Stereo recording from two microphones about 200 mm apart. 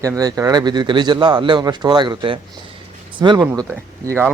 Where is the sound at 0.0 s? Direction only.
15° right (ahead or behind).